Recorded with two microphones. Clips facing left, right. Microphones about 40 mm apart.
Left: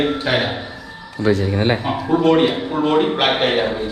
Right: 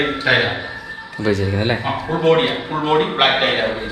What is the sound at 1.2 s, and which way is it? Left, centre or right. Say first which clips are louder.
Speech: left 1 dB; right.